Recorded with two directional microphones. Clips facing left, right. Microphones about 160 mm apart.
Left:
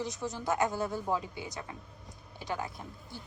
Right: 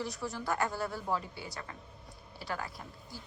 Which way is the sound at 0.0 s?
20° left (ahead or behind).